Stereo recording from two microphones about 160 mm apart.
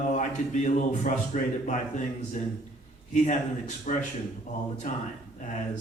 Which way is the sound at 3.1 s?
50° left (ahead or behind).